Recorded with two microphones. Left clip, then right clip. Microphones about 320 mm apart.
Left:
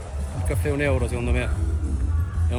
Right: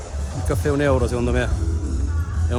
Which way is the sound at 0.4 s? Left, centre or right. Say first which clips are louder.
Right 4 dB; centre.